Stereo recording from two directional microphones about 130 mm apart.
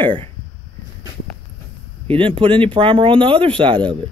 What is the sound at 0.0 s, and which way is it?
Speech, 40° right (ahead or behind).